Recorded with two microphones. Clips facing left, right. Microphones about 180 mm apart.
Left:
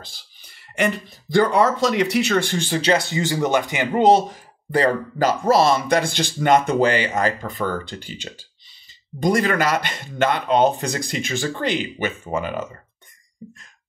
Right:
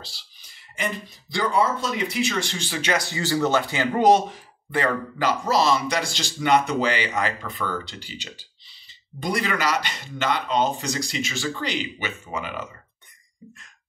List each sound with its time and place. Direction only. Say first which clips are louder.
0.0 s a sound: left 1 dB; 50° left (ahead or behind)
0.8 s speech: left 8 dB; 75° left (ahead or behind)
1.3 s speech: left 7 dB; 55° left (ahead or behind)
1.6 s speech: left 6 dB; 80° left; by 2.8 s 50° left (ahead or behind)
2.8 s speech: left 4 dB; 25° left (ahead or behind)
4.3 s speech: left 7 dB; 40° left (ahead or behind)
5.4 s speech: left 5 dB; 50° left (ahead or behind)